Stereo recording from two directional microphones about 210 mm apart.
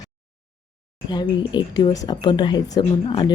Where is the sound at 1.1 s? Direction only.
20° left (ahead or behind).